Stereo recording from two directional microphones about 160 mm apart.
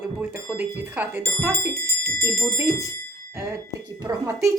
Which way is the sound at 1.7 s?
20° left (ahead or behind).